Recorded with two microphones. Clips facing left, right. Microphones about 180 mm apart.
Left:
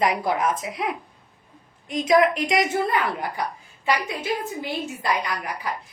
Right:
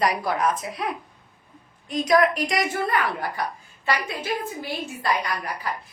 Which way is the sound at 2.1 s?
20° left (ahead or behind).